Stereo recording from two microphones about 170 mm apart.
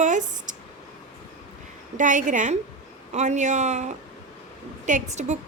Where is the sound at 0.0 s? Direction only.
45° right (ahead or behind).